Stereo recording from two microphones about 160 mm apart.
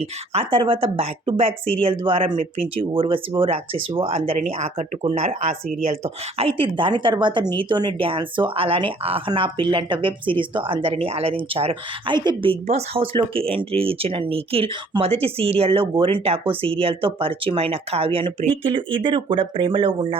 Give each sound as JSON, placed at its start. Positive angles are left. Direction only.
{"t": 0.0, "sound": "a woman's voice", "side_deg": -35}